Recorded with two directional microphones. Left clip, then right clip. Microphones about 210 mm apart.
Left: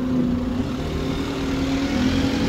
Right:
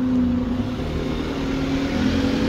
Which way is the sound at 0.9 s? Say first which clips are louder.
Even; 55° left (ahead or behind).